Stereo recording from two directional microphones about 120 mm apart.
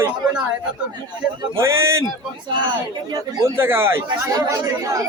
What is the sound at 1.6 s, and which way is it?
Speech, 20° right (ahead or behind).